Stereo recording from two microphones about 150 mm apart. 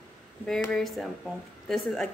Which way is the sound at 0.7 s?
Centre (ahead or behind).